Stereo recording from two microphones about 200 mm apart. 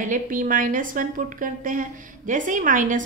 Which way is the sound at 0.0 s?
40° right (ahead or behind).